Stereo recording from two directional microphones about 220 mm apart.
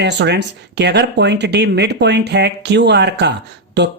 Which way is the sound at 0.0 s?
50° right (ahead or behind).